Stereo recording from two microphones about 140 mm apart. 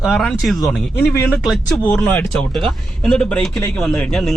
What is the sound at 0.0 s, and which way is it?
Speech, centre (ahead or behind).